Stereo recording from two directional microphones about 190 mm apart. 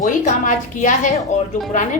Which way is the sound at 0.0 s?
40° left (ahead or behind).